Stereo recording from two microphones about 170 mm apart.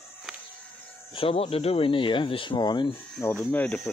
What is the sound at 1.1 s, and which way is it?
Speech, 35° left (ahead or behind).